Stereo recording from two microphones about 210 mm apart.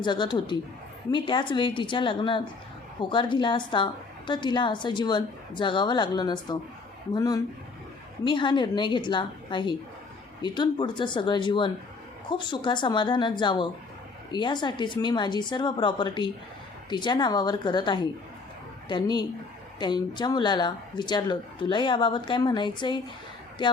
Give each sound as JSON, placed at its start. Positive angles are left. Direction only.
{"t": 0.0, "sound": "speech", "side_deg": 20}